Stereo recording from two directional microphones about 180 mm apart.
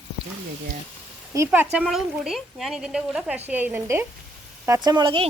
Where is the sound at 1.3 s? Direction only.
15° right (ahead or behind).